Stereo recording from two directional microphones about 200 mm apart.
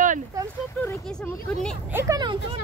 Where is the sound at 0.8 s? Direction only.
5° left (ahead or behind).